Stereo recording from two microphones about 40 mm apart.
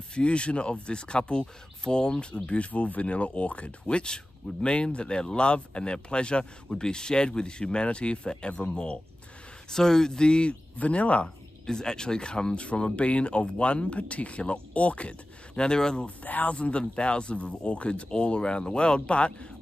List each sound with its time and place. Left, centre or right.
0.1 s speech: left
9.7 s speech: centre
10.8 s speech: left
11.2 s speech: centre
16.3 s speech: left
16.5 s speech: left